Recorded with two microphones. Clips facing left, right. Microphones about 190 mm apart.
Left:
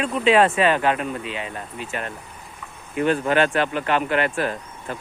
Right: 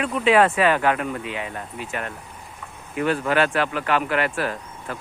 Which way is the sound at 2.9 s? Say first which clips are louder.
Left 2 dB; 30° left (ahead or behind).